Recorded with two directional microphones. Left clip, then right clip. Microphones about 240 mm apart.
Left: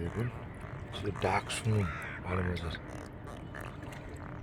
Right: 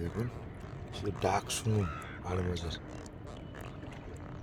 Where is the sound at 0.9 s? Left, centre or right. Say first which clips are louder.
Even; centre.